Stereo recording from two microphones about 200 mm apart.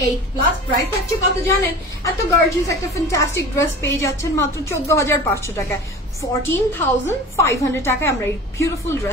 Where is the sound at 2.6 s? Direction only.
15° left (ahead or behind).